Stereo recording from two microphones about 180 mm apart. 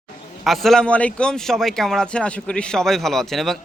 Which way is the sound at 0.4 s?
Centre (ahead or behind).